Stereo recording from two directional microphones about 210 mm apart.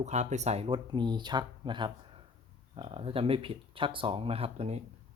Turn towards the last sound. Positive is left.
turn(degrees=-30)  # may be behind; listen again after turning